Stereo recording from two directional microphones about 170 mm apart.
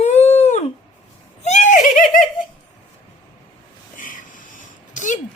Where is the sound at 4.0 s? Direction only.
50° left (ahead or behind).